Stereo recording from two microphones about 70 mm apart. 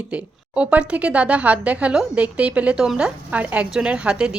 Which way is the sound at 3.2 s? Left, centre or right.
Right.